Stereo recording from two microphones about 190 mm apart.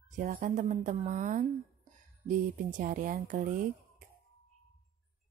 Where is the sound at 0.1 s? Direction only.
45° right (ahead or behind).